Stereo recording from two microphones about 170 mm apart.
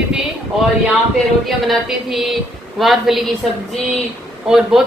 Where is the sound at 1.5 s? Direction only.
Centre (ahead or behind).